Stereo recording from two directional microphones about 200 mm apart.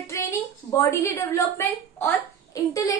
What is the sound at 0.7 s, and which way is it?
A woman's voice, 15° left (ahead or behind).